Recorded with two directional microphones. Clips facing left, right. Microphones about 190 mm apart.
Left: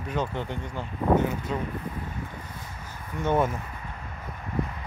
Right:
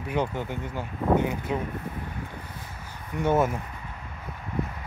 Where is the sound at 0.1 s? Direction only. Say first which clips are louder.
Right 2 dB; 10° right (ahead or behind).